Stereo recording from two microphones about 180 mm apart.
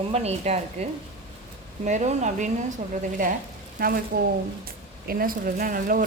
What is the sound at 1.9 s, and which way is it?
A woman's voice, 40° right (ahead or behind).